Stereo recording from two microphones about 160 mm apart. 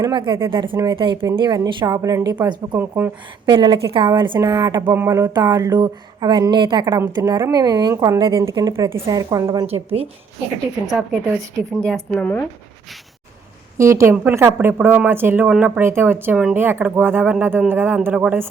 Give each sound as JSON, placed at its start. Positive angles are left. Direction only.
{"t": 0.0, "sound": "a woman's voice", "side_deg": -30}
{"t": 2.7, "sound": "a woman's voice", "side_deg": -15}
{"t": 3.4, "sound": "speech", "side_deg": -25}
{"t": 9.6, "sound": "a woman's voice", "side_deg": -40}
{"t": 12.1, "sound": "speech", "side_deg": 10}
{"t": 13.7, "sound": "a woman's voice", "side_deg": -20}